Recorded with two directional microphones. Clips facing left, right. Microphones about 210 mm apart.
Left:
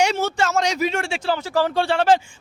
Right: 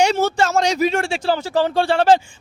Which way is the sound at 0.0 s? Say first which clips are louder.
Right 3 dB; 35° right (ahead or behind).